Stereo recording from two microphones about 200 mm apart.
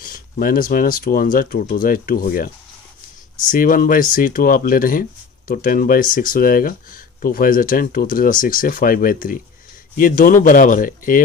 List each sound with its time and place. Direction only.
0.0 s speech: 45° left (ahead or behind)